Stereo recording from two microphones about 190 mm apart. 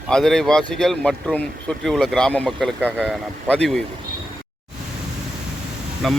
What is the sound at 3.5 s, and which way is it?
Speech, 5° left (ahead or behind).